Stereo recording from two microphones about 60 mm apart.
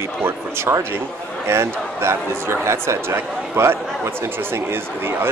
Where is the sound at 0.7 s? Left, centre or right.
Right.